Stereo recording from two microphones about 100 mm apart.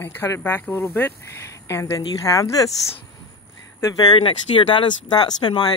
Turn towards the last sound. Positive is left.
turn(degrees=45)  # may be behind; listen again after turning